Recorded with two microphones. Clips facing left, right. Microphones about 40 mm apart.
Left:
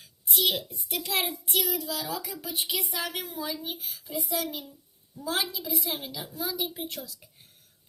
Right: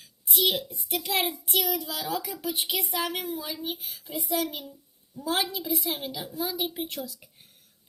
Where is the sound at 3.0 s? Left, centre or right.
Centre.